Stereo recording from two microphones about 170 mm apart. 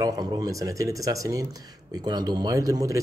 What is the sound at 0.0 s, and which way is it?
A man's voice, 20° right (ahead or behind).